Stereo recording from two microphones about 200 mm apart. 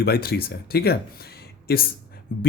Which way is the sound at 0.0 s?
50° left (ahead or behind).